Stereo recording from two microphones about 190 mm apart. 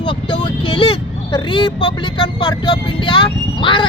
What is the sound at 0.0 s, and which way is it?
Speech, 25° left (ahead or behind).